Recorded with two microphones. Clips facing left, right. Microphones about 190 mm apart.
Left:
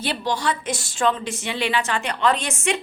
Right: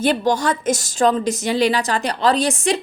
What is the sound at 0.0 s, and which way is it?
A woman's voice, 45° right (ahead or behind).